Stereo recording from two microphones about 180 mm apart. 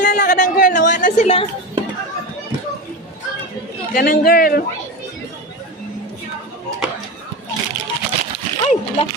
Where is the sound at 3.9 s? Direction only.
50° left (ahead or behind).